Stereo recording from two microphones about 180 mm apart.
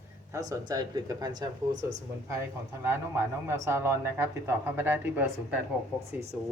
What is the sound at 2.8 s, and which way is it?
Speech, 15° right (ahead or behind).